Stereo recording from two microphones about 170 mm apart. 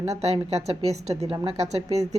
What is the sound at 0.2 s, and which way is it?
A woman's voice, 40° right (ahead or behind).